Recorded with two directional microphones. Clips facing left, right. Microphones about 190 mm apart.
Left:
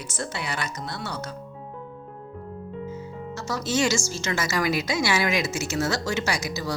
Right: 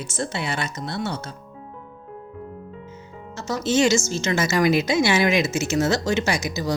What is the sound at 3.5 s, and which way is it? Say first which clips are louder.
A woman's voice: right 5 dB; 25° right (ahead or behind).